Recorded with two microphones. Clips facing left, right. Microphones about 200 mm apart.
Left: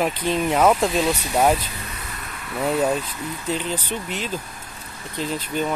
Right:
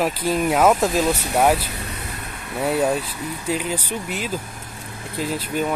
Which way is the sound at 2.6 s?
5° right (ahead or behind).